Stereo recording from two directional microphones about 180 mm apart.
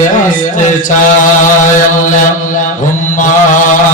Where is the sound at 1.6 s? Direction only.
45° left (ahead or behind).